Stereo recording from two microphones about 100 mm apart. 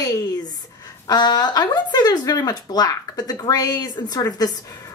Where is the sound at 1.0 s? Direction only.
45° left (ahead or behind).